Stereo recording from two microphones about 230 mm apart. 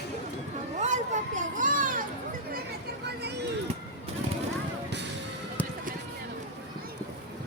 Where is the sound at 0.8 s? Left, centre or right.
Right.